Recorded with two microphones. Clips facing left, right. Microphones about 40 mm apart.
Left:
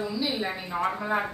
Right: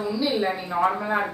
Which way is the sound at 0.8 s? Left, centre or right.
Right.